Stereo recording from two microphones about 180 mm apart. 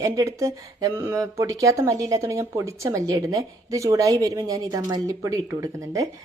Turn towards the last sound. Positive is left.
turn(degrees=-20)  # may be behind; listen again after turning